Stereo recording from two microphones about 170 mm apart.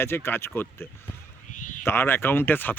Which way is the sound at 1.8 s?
15° left (ahead or behind).